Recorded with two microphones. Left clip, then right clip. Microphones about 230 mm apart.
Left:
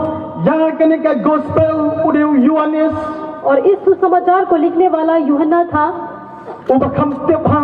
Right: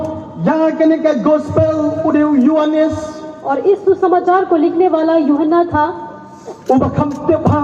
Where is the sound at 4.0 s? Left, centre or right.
Right.